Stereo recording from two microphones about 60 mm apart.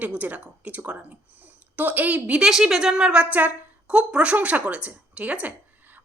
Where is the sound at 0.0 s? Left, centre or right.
Right.